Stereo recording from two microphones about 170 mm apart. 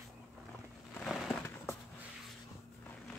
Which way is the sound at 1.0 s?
Centre (ahead or behind).